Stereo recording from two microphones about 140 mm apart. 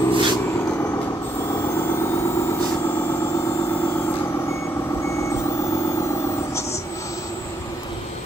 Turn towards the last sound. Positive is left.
turn(degrees=20)  # may be behind; listen again after turning